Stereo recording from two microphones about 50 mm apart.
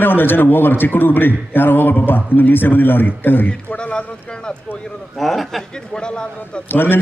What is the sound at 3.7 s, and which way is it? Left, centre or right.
Speech, left.